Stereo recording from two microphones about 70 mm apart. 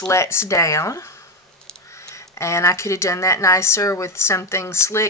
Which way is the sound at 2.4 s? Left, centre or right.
Left.